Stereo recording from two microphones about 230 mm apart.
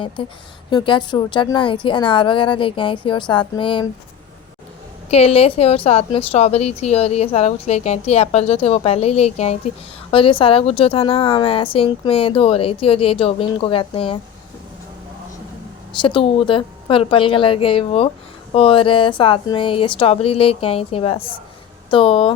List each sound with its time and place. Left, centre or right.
0.2 s a woman's voice: left
5.0 s a woman's voice: left
15.9 s a woman's voice: left